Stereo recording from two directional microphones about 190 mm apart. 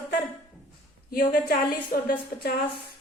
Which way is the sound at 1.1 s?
55° left (ahead or behind).